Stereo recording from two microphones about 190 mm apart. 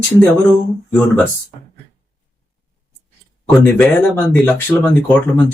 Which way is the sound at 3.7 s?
5° left (ahead or behind).